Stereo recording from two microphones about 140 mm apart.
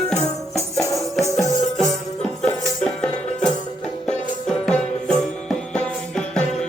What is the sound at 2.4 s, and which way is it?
Music, 5° left (ahead or behind).